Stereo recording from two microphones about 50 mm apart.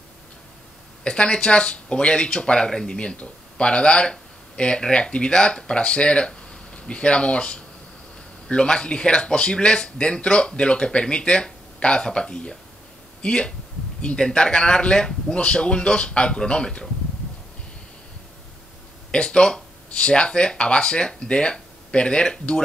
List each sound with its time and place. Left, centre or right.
1.0 s speech: centre
19.1 s speech: centre